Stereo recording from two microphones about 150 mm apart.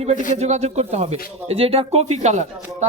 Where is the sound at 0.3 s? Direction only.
50° right (ahead or behind).